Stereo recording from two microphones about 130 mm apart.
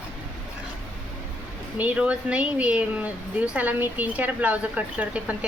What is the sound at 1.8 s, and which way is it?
Speech, 10° right (ahead or behind).